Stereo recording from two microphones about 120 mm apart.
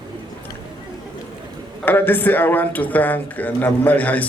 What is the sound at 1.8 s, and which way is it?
A man's voice, 15° left (ahead or behind).